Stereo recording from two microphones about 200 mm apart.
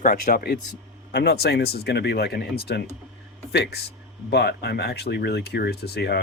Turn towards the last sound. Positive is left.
turn(degrees=55)  # may be behind; listen again after turning